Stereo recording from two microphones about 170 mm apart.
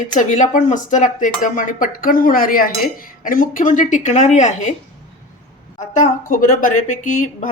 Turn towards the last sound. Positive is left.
turn(degrees=50)  # may be behind; listen again after turning